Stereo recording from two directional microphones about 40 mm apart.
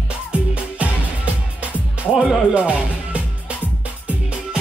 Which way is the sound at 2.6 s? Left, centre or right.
Right.